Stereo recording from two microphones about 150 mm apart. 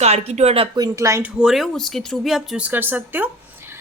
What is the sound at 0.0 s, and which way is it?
Speech, 45° right (ahead or behind).